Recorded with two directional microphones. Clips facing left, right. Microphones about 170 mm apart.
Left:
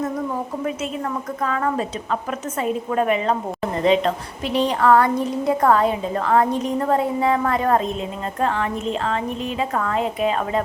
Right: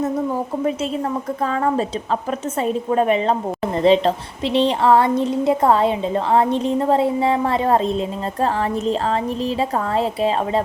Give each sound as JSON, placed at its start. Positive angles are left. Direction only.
{"t": 1.5, "sound": "speech", "side_deg": -30}